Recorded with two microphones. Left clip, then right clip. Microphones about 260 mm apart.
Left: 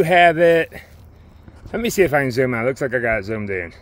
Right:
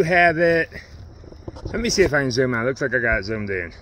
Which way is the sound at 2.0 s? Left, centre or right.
Centre.